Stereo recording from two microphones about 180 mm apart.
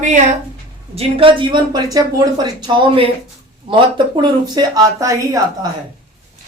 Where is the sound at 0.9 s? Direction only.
30° right (ahead or behind).